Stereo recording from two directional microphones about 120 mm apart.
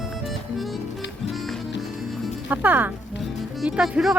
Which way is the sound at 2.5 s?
15° right (ahead or behind).